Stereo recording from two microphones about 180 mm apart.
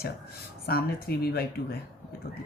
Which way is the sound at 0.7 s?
60° left (ahead or behind).